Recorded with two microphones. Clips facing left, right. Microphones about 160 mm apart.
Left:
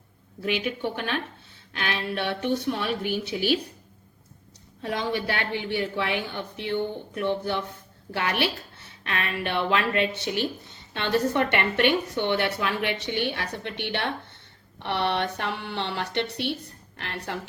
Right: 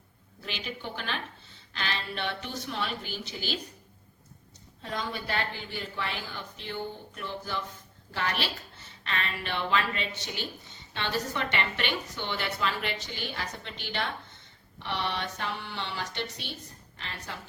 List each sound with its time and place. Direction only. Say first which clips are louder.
0.4 s a woman's voice: left 10 dB; 60° left (ahead or behind)
4.8 s a woman's voice: left 7 dB; 70° left (ahead or behind)